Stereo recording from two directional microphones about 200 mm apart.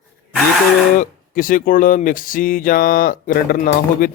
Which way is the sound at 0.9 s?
45° left (ahead or behind).